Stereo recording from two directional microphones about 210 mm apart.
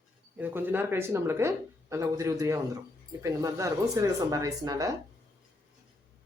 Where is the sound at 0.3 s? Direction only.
10° right (ahead or behind).